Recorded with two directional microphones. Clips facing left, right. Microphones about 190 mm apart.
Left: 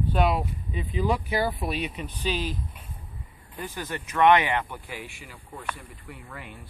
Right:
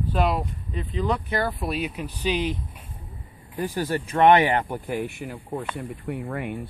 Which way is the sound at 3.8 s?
35° right (ahead or behind).